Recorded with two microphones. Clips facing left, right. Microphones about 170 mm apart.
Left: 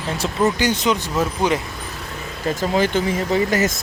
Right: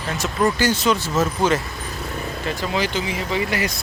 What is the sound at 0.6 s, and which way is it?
Speech, 20° left (ahead or behind).